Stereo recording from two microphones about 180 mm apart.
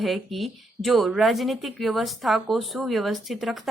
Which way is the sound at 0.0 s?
Centre (ahead or behind).